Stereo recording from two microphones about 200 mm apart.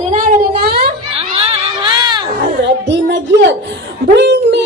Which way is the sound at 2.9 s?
60° right (ahead or behind).